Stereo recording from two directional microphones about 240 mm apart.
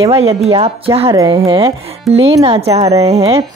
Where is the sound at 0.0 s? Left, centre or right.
Right.